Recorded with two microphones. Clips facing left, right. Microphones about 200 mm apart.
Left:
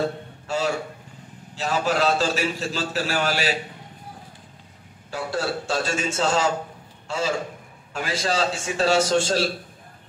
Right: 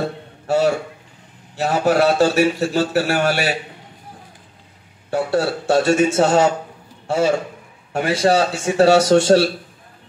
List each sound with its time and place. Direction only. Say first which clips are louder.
1.5 s a man's voice: right 7 dB; 65° right (ahead or behind)
5.1 s a man's voice: right 7 dB; 65° right (ahead or behind)